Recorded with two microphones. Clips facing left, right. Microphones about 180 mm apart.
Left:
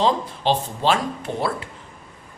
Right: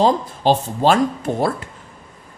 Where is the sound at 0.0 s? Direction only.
45° right (ahead or behind).